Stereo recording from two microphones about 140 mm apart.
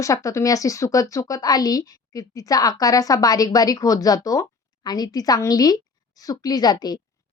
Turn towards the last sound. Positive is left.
turn(degrees=30)  # may be behind; listen again after turning